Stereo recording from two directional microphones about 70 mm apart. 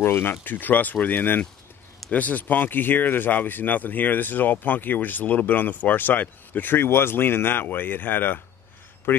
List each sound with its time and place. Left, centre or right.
0.0 s speech: left